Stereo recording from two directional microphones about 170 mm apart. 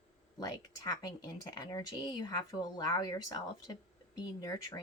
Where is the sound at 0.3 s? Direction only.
20° left (ahead or behind).